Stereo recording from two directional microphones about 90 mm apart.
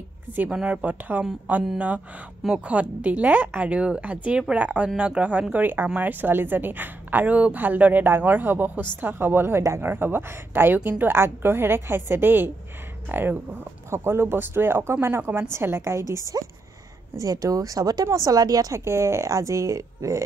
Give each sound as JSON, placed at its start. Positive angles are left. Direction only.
{"t": 0.5, "sound": "a woman's voice", "side_deg": -10}
{"t": 2.4, "sound": "a woman's voice", "side_deg": -10}
{"t": 18.9, "sound": "speech", "side_deg": -30}